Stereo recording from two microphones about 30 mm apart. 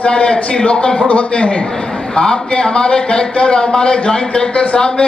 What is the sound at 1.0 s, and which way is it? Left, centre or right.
Speech, left.